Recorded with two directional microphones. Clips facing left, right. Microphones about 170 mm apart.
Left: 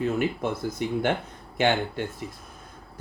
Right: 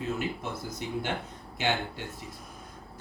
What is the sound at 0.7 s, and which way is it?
Speech, 55° left (ahead or behind).